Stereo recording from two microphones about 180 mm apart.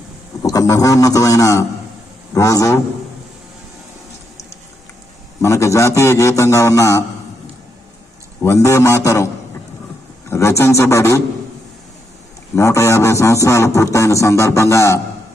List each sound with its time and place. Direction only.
0.4 s a man's voice: 20° left (ahead or behind)
5.4 s a man's voice: 15° left (ahead or behind)
8.4 s a man's voice: 15° left (ahead or behind)
12.5 s a man's voice: 15° left (ahead or behind)